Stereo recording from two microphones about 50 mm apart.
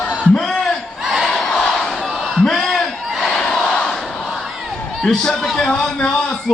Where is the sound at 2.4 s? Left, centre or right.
Centre.